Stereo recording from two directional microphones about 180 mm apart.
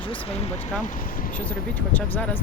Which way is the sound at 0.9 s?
50° left (ahead or behind).